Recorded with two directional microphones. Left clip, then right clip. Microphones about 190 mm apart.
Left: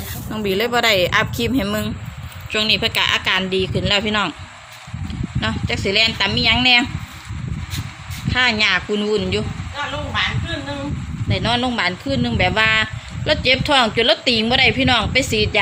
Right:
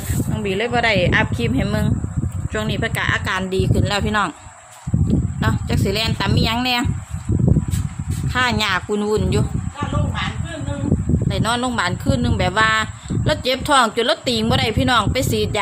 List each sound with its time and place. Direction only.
0.3 s speech: 15° left (ahead or behind); by 4.4 s centre (ahead or behind)
5.4 s speech: centre (ahead or behind)
8.3 s speech: 5° right (ahead or behind)
11.3 s speech: centre (ahead or behind)